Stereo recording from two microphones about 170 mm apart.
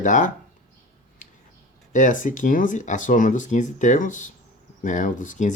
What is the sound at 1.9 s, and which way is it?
Speech, 50° left (ahead or behind).